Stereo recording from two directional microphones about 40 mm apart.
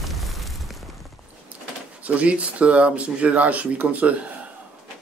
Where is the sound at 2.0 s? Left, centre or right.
Right.